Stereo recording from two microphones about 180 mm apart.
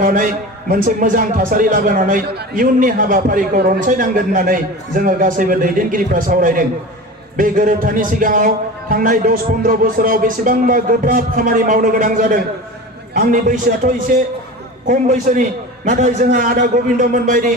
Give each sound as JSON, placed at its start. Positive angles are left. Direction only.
{"t": 0.0, "sound": "a man's voice", "side_deg": -50}